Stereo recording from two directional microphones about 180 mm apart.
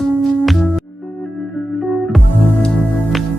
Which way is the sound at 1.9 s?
5° left (ahead or behind).